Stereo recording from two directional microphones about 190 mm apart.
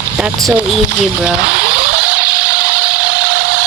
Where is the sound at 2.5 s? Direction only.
20° left (ahead or behind).